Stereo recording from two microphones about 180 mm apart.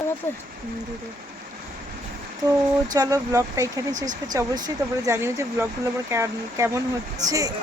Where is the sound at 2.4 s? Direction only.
20° right (ahead or behind).